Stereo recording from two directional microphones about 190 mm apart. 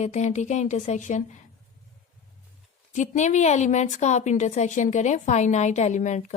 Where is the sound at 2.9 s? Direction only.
40° left (ahead or behind).